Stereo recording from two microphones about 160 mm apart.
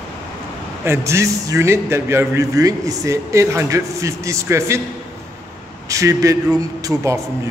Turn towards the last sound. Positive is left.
turn(degrees=-20)  # may be behind; listen again after turning